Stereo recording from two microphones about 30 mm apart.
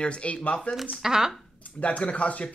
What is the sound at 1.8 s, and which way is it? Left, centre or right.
Speech, left.